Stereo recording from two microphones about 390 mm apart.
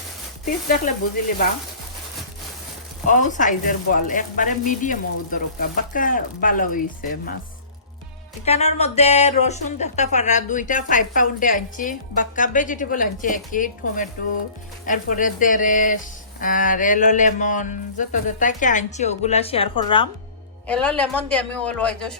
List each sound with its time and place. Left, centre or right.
3.1 s speech: centre
8.4 s a woman's voice: centre